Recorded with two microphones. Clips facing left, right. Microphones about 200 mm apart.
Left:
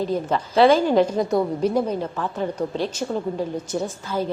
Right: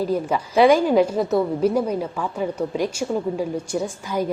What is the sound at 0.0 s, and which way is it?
A woman's voice, 10° right (ahead or behind).